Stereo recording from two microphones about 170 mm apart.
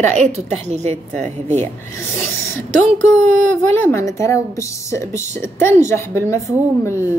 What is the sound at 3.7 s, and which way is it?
A woman's voice, 15° left (ahead or behind).